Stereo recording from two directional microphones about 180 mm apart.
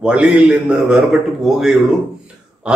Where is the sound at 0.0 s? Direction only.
5° right (ahead or behind).